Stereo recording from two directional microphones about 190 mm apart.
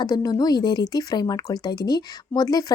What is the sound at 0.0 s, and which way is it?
A woman's voice, 20° left (ahead or behind).